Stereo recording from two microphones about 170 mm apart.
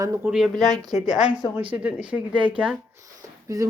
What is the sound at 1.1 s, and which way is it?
Speech, 25° right (ahead or behind).